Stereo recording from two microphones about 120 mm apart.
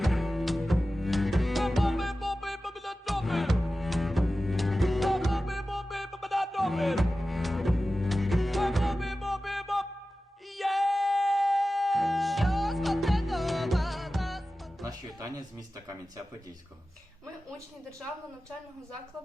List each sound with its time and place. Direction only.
0.0 s music: centre (ahead or behind)
14.8 s music: 30° right (ahead or behind)